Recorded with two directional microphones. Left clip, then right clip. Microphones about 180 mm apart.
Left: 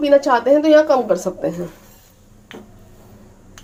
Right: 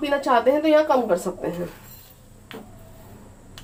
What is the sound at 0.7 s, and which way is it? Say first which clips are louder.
Speech: left 5 dB; 45° left (ahead or behind).